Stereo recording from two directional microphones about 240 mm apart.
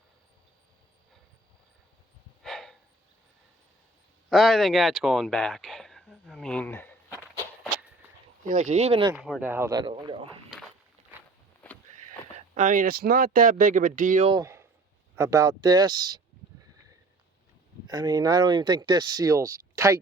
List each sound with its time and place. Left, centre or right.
2.4 s a sound: centre
4.3 s speech: centre
8.4 s speech: right
9.1 s speech: centre
11.6 s a sound: centre
12.5 s speech: right
14.3 s speech: centre
17.8 s speech: centre